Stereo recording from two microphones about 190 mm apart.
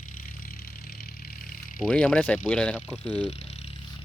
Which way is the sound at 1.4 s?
45° left (ahead or behind).